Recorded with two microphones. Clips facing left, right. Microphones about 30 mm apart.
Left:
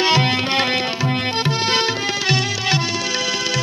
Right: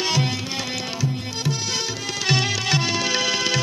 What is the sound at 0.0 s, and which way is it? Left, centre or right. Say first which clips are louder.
Tabla: left 7 dB; left.